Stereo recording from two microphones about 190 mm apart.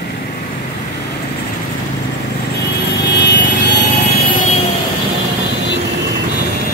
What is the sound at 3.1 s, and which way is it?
Vehicle, 70° left (ahead or behind).